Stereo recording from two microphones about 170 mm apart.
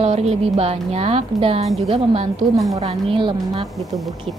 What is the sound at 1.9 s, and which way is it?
A woman's voice, 35° right (ahead or behind).